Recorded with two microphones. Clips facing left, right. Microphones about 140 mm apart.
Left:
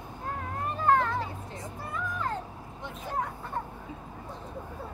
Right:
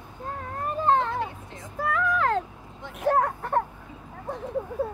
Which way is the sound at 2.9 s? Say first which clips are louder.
Right 11 dB; 70° right (ahead or behind).